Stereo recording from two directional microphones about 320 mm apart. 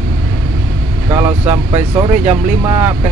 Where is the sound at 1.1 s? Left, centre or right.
Centre.